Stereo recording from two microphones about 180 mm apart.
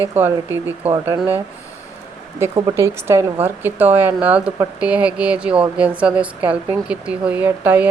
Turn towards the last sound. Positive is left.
turn(degrees=-10)  # may be behind; listen again after turning